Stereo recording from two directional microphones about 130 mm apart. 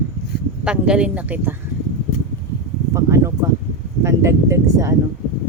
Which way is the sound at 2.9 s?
20° right (ahead or behind).